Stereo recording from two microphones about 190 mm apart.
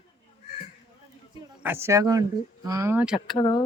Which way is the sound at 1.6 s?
15° right (ahead or behind).